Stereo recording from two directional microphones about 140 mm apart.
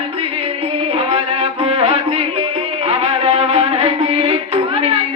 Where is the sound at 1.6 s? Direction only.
45° right (ahead or behind).